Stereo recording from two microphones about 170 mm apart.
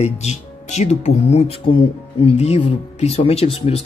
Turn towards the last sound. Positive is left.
turn(degrees=35)  # may be behind; listen again after turning